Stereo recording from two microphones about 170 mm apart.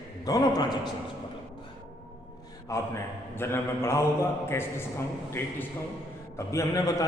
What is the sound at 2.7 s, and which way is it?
A man's voice, 20° left (ahead or behind).